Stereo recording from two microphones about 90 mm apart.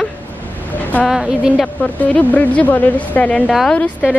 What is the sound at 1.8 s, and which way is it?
A woman's voice, 15° left (ahead or behind).